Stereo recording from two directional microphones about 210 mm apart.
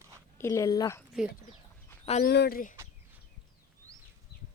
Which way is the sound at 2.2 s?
50° left (ahead or behind).